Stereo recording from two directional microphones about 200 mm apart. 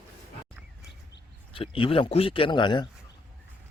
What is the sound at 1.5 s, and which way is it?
Speech, 25° left (ahead or behind).